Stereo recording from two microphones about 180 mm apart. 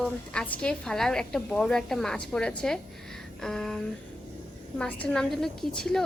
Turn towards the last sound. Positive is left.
turn(degrees=5)  # may be behind; listen again after turning